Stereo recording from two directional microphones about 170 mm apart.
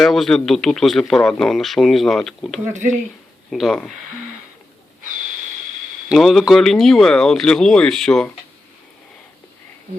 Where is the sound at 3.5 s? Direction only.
Centre (ahead or behind).